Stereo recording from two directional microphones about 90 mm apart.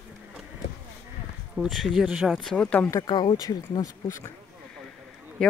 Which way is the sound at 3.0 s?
55° left (ahead or behind).